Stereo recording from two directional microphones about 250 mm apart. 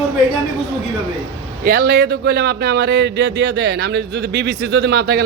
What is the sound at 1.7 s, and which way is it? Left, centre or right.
A man's voice, right.